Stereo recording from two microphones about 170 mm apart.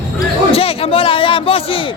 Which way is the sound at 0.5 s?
35° left (ahead or behind).